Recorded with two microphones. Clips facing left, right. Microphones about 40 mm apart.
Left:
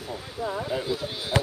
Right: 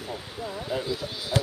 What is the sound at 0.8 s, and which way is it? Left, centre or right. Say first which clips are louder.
Speech: left 2 dB; left.